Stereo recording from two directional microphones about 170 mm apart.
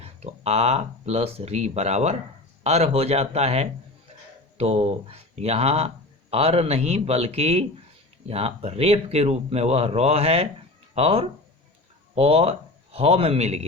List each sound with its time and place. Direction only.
0.0 s speech: 40° right (ahead or behind)